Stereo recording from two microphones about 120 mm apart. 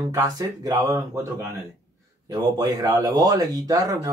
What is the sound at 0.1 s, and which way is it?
Speech, 30° right (ahead or behind).